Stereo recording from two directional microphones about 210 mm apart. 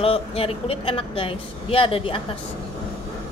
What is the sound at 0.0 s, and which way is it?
Speech, 30° left (ahead or behind).